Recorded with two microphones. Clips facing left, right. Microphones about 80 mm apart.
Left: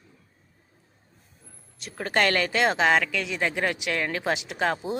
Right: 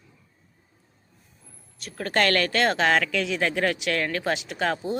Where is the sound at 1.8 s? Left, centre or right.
Left.